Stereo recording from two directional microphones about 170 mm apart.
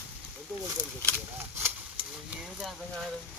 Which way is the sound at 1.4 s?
15° right (ahead or behind).